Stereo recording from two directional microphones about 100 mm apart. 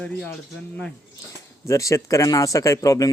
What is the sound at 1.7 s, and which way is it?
Speech, 30° left (ahead or behind).